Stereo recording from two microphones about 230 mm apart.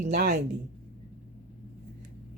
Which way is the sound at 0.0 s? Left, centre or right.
Right.